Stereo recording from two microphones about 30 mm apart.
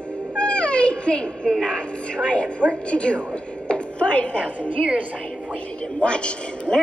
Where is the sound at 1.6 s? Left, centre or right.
Left.